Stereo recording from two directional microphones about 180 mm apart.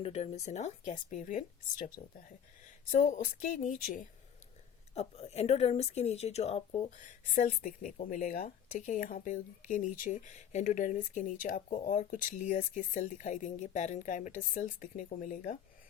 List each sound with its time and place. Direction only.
0.0 s speech: 35° left (ahead or behind)
2.9 s speech: 45° left (ahead or behind)
4.9 s speech: 35° left (ahead or behind)